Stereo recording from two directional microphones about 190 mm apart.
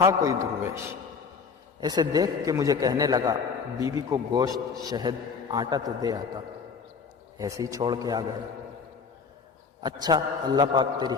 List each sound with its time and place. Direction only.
0.0 s a man's voice: 15° right (ahead or behind)
7.3 s a man's voice: 15° right (ahead or behind)
9.8 s a man's voice: 20° right (ahead or behind)